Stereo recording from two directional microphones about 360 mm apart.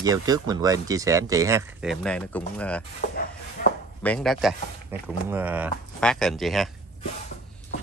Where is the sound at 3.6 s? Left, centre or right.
Left.